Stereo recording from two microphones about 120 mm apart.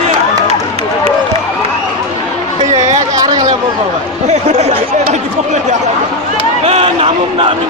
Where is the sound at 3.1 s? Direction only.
30° right (ahead or behind).